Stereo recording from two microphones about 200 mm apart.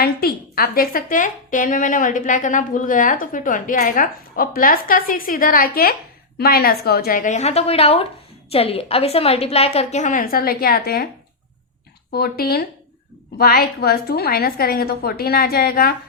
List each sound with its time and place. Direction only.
0.0 s a woman's voice: 50° left (ahead or behind)
12.1 s a woman's voice: 50° left (ahead or behind)